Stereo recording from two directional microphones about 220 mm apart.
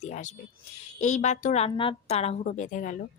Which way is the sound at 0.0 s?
35° left (ahead or behind).